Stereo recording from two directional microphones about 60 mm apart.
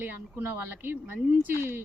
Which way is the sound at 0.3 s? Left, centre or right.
Right.